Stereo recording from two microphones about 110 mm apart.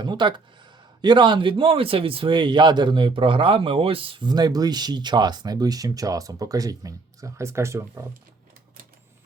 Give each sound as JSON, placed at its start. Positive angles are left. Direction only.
{"t": 0.0, "sound": "a man's voice", "side_deg": -45}